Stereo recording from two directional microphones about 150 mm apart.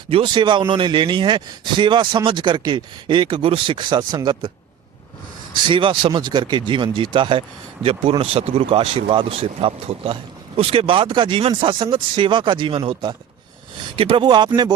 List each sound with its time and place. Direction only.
0.1 s speech: 35° right (ahead or behind)
5.6 s speech: 35° right (ahead or behind)